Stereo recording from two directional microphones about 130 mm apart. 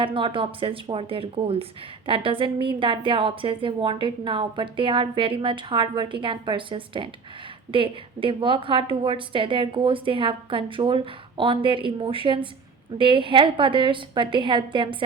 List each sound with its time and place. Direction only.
0.0 s a woman's voice: 40° right (ahead or behind)